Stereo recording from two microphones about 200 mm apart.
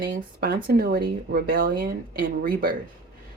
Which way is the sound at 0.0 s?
50° right (ahead or behind).